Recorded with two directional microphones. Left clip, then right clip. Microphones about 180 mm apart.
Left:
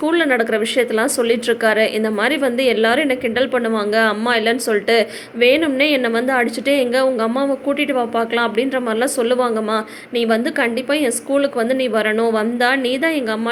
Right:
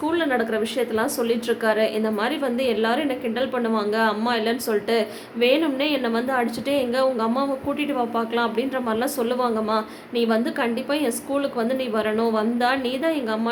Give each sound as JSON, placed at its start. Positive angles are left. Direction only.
{"t": 0.0, "sound": "speech", "side_deg": 25}